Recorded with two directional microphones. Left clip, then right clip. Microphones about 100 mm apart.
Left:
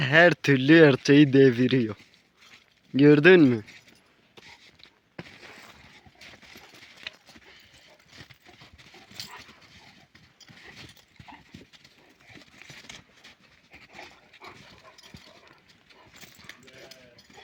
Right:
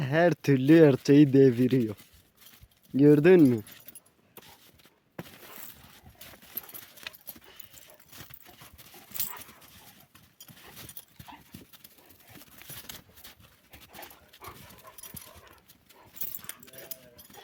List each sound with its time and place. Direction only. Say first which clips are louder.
0.0 s speech: left 6 dB; centre (ahead or behind)
0.4 s speech: left 3 dB; 15° right (ahead or behind)
2.9 s speech: left 2 dB; centre (ahead or behind)
3.2 s speech: left 3 dB; 15° right (ahead or behind)
8.5 s a sound: left 2 dB; 15° right (ahead or behind)
9.5 s dog: left 2 dB; 30° right (ahead or behind)
12.6 s a sound: left 2 dB; 65° right (ahead or behind)
13.7 s dog: left 2 dB; 60° right (ahead or behind)
14.4 s dog: even; 30° right (ahead or behind)